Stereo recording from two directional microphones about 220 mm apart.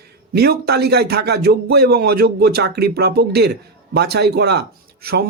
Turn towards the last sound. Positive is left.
turn(degrees=-45)  # may be behind; listen again after turning